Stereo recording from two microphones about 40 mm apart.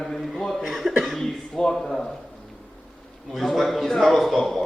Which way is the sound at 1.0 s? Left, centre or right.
Centre.